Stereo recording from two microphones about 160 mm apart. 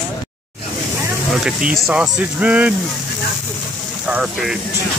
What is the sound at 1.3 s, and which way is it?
Speech, 5° right (ahead or behind).